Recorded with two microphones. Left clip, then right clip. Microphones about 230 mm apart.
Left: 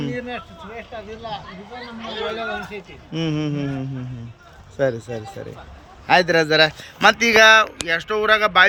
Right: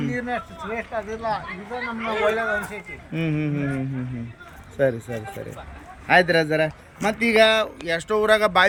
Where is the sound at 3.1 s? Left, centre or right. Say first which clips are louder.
Left 2 dB; centre.